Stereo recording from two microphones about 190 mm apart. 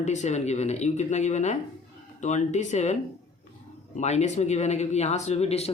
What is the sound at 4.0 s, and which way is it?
Speech, 35° left (ahead or behind).